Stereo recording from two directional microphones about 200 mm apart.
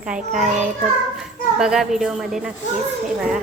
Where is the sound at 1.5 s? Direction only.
5° right (ahead or behind).